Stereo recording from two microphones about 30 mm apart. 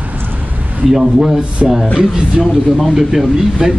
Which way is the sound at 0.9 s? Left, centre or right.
Centre.